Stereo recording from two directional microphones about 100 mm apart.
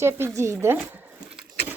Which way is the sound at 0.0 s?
25° right (ahead or behind).